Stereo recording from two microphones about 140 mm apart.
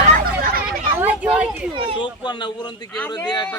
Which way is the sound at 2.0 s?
35° left (ahead or behind).